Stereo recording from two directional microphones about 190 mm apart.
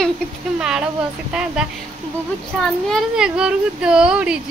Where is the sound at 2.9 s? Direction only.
5° right (ahead or behind).